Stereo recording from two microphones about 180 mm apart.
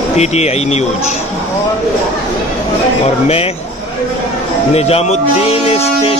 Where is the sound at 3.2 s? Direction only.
35° left (ahead or behind).